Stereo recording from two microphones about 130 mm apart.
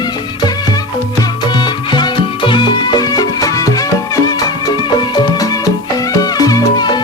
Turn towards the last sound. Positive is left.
turn(degrees=30)  # may be behind; listen again after turning